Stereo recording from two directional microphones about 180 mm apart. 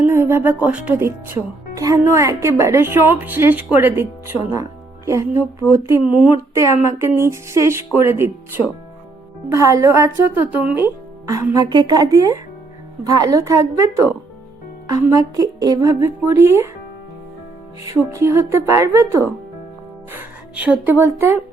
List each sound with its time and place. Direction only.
0.0 s speech: 15° right (ahead or behind)
9.5 s speech: 15° right (ahead or behind)
17.8 s a woman's voice: 15° right (ahead or behind)